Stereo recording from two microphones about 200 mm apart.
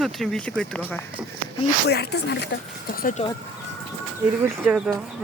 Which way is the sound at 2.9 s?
45° left (ahead or behind).